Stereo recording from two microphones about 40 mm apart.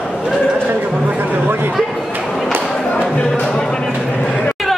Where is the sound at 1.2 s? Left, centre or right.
Right.